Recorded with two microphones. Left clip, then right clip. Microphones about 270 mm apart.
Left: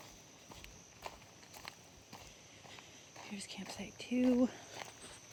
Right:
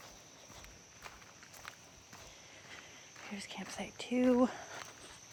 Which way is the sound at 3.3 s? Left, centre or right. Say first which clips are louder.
Right 3 dB; right.